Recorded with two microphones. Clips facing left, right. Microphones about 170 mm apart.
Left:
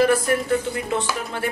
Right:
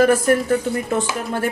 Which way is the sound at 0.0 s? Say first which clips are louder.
Right 3 dB; 45° right (ahead or behind).